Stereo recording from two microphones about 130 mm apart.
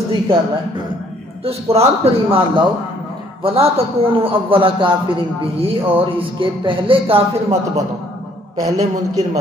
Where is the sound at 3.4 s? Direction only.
45° right (ahead or behind).